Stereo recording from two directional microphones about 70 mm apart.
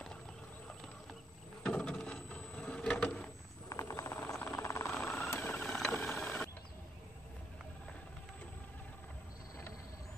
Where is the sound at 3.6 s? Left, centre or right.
Left.